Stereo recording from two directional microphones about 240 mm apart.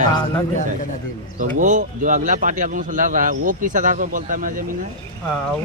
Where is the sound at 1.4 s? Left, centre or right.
Right.